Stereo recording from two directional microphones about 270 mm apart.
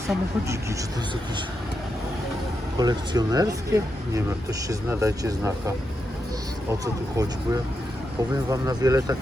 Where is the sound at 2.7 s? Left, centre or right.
Centre.